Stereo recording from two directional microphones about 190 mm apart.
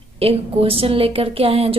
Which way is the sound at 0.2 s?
30° right (ahead or behind).